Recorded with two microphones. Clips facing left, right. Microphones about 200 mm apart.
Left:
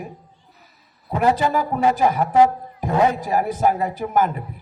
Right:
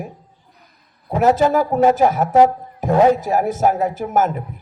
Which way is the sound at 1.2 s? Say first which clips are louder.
Right 4 dB; 45° right (ahead or behind).